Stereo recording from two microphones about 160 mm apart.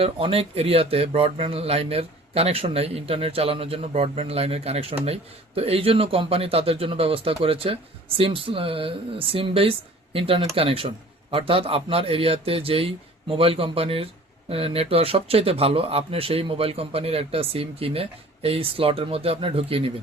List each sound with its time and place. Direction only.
0.0 s speech: 35° right (ahead or behind)